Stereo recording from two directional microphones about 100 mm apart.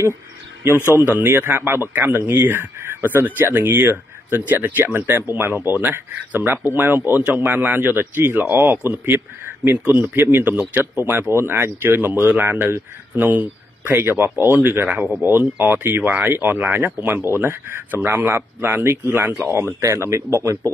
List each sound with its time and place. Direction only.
0.9 s speech: 20° right (ahead or behind)